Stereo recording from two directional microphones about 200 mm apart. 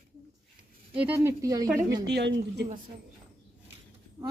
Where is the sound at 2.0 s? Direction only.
55° right (ahead or behind).